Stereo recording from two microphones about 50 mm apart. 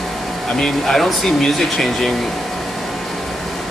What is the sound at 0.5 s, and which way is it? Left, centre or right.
Speech, centre.